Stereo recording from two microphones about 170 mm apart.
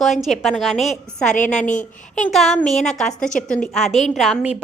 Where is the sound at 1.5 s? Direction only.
50° left (ahead or behind).